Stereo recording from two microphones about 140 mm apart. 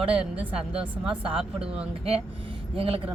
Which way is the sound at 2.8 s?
40° right (ahead or behind).